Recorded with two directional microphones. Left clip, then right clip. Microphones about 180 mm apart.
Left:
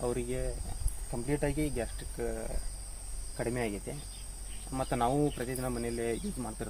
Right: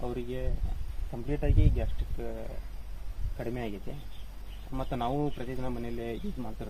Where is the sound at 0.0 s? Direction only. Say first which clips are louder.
Left 2 dB; 15° left (ahead or behind).